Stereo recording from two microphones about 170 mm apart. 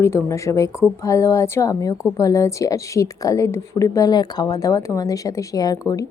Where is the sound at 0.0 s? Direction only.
15° left (ahead or behind).